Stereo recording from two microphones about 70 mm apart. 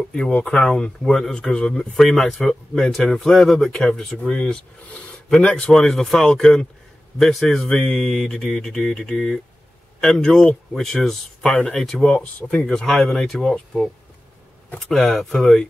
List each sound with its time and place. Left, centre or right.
0.1 s speech: centre
12.1 s speech: centre
12.6 s speech: centre
14.9 s speech: centre